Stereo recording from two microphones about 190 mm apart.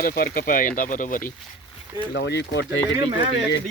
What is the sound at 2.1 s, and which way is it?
Speech, 60° left (ahead or behind).